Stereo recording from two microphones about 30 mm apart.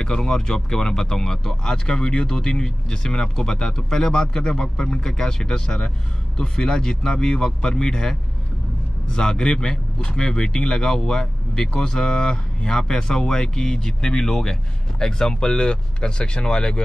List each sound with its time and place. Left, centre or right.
0.0 s speech: left